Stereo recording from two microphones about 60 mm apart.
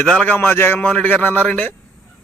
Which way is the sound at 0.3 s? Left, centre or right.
Left.